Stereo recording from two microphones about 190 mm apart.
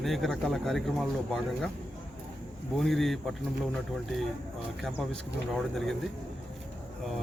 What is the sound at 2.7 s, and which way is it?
Speech, centre (ahead or behind).